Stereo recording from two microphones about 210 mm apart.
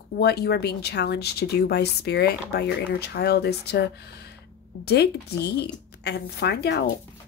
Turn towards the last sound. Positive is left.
turn(degrees=50)  # may be behind; listen again after turning